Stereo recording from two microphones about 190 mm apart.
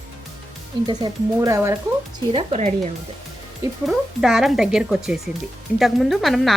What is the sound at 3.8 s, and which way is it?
Speech, centre (ahead or behind).